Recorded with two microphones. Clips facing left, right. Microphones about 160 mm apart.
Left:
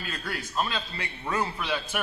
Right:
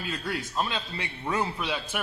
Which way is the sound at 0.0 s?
20° right (ahead or behind).